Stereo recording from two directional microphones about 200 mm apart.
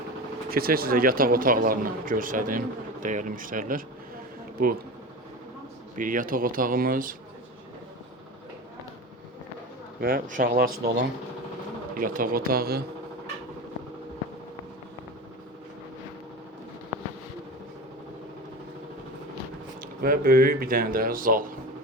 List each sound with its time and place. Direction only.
0.5 s speech: 50° right (ahead or behind)
6.0 s speech: 40° right (ahead or behind)
10.0 s speech: 45° right (ahead or behind)
20.0 s speech: 45° right (ahead or behind)